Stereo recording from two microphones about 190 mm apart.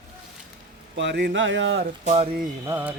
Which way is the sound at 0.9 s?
70° right (ahead or behind).